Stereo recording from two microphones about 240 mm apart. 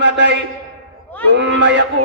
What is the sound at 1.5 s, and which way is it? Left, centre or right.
Speech, right.